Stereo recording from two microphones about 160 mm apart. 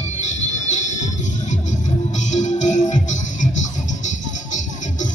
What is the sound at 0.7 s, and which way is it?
Music, 45° left (ahead or behind).